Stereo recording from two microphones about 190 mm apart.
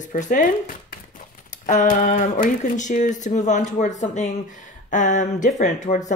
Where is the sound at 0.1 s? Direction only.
45° left (ahead or behind).